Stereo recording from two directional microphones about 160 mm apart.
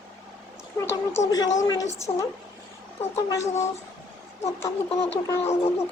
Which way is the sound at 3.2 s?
20° left (ahead or behind).